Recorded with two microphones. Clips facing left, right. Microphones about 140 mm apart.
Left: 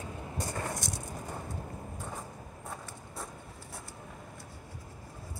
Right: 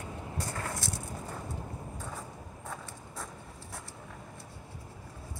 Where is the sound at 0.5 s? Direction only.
20° left (ahead or behind).